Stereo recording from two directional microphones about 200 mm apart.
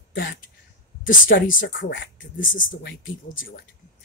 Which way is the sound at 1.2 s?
70° left (ahead or behind).